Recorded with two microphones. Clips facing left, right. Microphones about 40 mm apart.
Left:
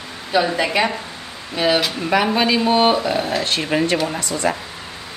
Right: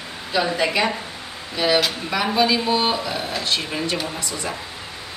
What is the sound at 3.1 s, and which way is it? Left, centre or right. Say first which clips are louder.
Speech: left 6 dB; centre.